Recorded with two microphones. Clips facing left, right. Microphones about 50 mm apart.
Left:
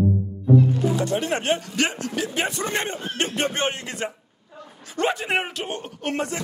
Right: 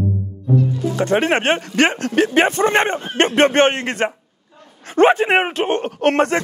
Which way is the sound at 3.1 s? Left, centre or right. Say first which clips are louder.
Right 12 dB; right.